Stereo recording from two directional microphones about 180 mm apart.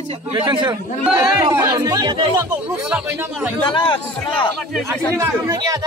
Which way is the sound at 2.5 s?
5° right (ahead or behind).